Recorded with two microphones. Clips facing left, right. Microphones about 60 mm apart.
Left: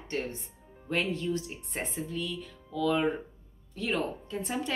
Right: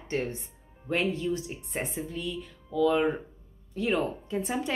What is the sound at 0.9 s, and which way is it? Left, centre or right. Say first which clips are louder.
Speech: right 2 dB; centre.